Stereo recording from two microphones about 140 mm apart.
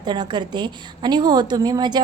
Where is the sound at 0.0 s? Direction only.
30° right (ahead or behind).